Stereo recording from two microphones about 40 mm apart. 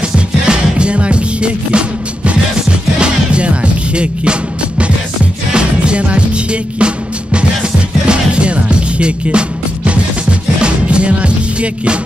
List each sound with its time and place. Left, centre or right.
0.5 s music: right
8.1 s music: right
10.6 s music: right